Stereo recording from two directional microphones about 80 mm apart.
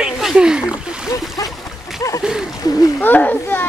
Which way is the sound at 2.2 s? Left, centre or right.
Centre.